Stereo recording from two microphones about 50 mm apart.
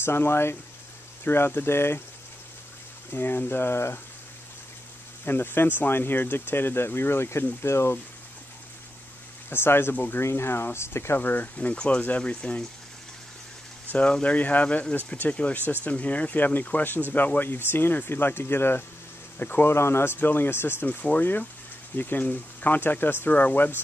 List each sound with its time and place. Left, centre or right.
0.0 s speech: left
3.1 s speech: left
5.2 s speech: left
9.5 s speech: left
9.9 s speech: left
10.2 s speech: left
11.1 s speech: left
13.9 s speech: left
19.3 s speech: left
19.7 s speech: left
20.2 s speech: left
20.8 s speech: left
23.2 s speech: left
23.5 s speech: left